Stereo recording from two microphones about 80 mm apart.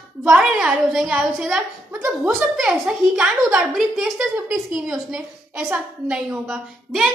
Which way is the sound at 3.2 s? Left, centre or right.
Centre.